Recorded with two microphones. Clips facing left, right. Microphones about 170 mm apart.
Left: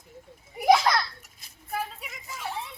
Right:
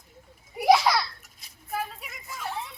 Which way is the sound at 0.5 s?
Centre (ahead or behind).